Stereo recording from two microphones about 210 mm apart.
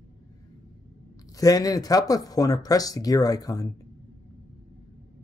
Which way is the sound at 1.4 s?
15° left (ahead or behind).